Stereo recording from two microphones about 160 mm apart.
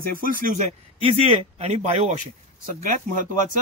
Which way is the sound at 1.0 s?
40° right (ahead or behind).